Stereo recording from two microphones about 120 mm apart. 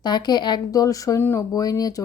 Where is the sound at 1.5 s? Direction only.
30° left (ahead or behind).